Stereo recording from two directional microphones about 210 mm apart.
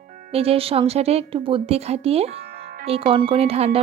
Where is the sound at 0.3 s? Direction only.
30° right (ahead or behind).